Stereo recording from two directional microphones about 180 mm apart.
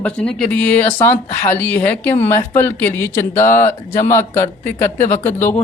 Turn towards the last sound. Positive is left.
turn(degrees=15)  # may be behind; listen again after turning